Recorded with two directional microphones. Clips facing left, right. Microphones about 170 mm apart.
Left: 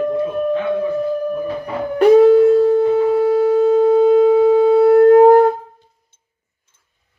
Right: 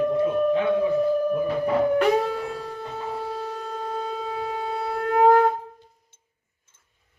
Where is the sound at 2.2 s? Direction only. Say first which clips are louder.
Left 19 dB; 55° left (ahead or behind).